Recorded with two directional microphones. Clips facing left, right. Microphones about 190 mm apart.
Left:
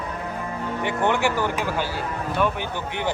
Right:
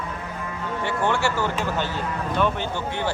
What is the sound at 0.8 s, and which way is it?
Speech, 15° left (ahead or behind).